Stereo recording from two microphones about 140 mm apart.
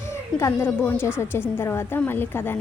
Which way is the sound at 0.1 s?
20° left (ahead or behind).